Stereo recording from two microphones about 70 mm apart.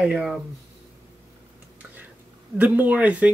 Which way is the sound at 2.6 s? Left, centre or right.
Right.